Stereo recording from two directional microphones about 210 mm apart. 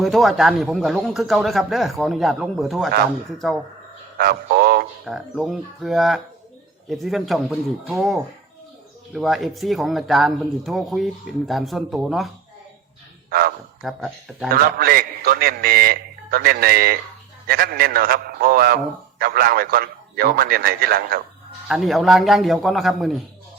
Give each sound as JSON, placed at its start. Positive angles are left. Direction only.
{"t": 0.0, "sound": "speech", "side_deg": 0}
{"t": 4.2, "sound": "a man's voice", "side_deg": -45}
{"t": 5.0, "sound": "speech", "side_deg": 0}
{"t": 13.8, "sound": "speech", "side_deg": 0}
{"t": 14.5, "sound": "a man's voice", "side_deg": -45}
{"t": 21.7, "sound": "speech", "side_deg": 0}